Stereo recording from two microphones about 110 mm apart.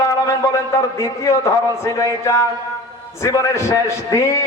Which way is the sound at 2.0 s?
25° left (ahead or behind).